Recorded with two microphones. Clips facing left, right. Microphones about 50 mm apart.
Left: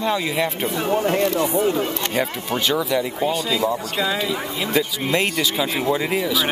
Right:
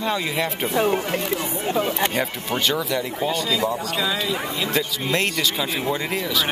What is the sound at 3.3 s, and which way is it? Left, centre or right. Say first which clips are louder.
Speech: even; centre.